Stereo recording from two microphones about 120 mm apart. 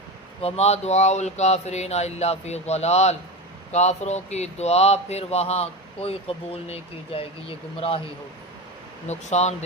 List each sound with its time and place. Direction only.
0.4 s a man's voice: 65° left (ahead or behind)
9.0 s speech: 70° left (ahead or behind)